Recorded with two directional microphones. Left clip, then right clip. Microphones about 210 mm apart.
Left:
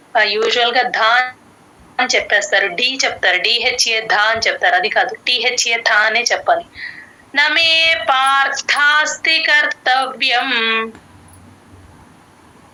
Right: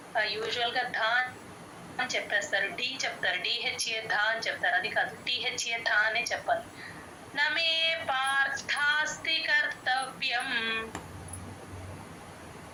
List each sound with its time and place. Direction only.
0.1 s a woman's voice: 45° left (ahead or behind)